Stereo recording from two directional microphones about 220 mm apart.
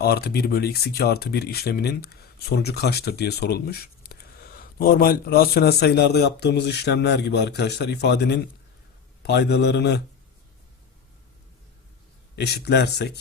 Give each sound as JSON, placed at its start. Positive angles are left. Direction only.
{"t": 0.0, "sound": "speech", "side_deg": 45}
{"t": 12.4, "sound": "speech", "side_deg": 50}